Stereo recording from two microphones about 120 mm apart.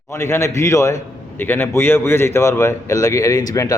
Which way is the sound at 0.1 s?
25° left (ahead or behind).